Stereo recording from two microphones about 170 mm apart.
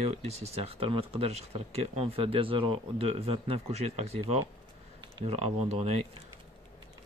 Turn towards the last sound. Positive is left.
turn(degrees=-40)  # may be behind; listen again after turning